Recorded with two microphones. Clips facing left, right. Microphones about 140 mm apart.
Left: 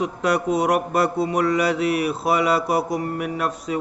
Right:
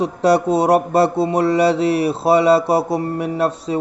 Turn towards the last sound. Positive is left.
turn(degrees=-30)  # may be behind; listen again after turning